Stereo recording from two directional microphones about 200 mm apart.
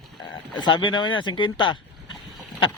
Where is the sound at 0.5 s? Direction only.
20° left (ahead or behind).